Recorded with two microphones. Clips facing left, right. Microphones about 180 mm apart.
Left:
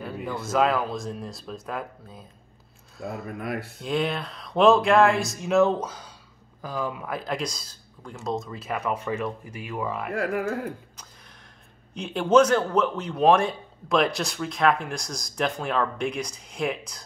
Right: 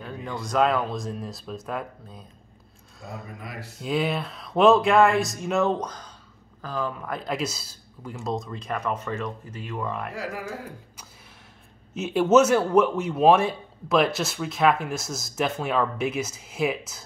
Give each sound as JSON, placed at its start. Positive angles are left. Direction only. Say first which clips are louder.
{"t": 0.0, "sound": "speech", "louder": "left 2 dB", "side_deg": 5}
{"t": 3.3, "sound": "speech", "louder": "left 8 dB", "side_deg": 60}
{"t": 3.8, "sound": "speech", "louder": "right 2 dB", "side_deg": 0}
{"t": 10.1, "sound": "speech", "louder": "left 6 dB", "side_deg": 55}
{"t": 11.9, "sound": "speech", "louder": "right 1 dB", "side_deg": -5}